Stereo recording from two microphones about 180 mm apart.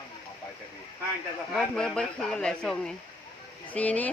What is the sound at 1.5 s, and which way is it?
Speech, 5° left (ahead or behind).